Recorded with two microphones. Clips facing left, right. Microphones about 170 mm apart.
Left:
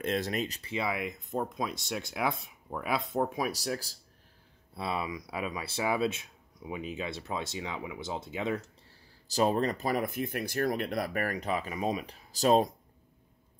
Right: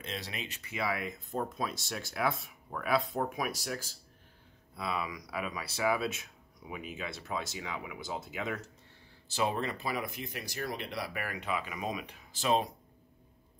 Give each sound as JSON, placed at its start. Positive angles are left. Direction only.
{"t": 0.0, "sound": "speech", "side_deg": 50}
{"t": 9.3, "sound": "speech", "side_deg": 40}